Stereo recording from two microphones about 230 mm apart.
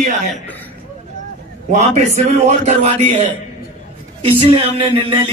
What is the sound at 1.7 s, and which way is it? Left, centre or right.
A man's voice, right.